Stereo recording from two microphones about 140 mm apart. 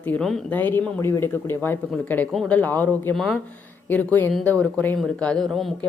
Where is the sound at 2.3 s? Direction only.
Centre (ahead or behind).